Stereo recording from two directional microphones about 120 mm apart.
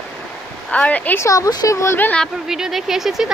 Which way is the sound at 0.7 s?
10° left (ahead or behind).